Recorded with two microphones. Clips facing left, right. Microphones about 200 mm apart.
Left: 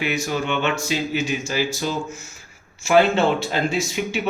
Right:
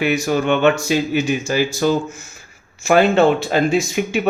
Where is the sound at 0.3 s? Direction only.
50° right (ahead or behind).